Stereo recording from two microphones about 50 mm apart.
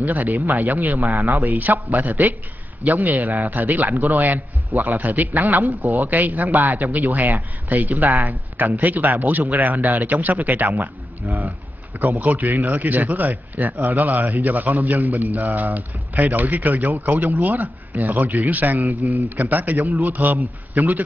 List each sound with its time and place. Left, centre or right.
0.0 s a man's voice: right
1.4 s a man's voice: right
3.2 s speech: right
3.4 s a man's voice: right
3.9 s speech: right
4.2 s a man's voice: right
10.7 s a man's voice: right
12.0 s a man's voice: right